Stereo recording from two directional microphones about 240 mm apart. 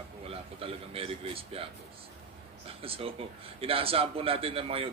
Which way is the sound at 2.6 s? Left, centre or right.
Right.